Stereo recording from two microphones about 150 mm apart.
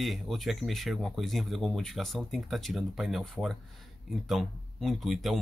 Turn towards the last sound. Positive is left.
turn(degrees=0)  # may be behind; listen again after turning